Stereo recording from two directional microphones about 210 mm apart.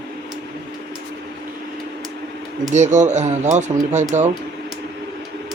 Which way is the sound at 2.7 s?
35° right (ahead or behind).